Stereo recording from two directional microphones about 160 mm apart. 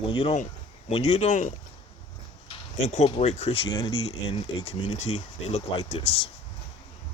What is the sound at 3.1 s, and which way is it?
Speech, 40° left (ahead or behind).